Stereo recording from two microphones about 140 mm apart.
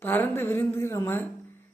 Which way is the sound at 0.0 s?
15° left (ahead or behind).